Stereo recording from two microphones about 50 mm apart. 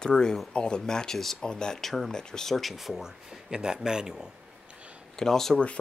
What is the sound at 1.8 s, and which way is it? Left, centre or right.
Speech, centre.